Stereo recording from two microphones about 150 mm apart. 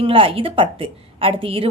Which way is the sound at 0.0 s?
35° right (ahead or behind).